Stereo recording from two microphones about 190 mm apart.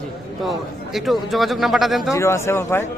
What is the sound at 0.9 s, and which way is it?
Speech, centre (ahead or behind).